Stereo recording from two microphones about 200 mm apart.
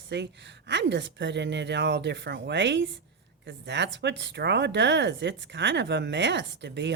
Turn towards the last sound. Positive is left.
turn(degrees=-60)  # may be behind; listen again after turning